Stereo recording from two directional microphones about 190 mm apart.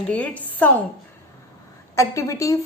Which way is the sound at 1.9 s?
15° left (ahead or behind).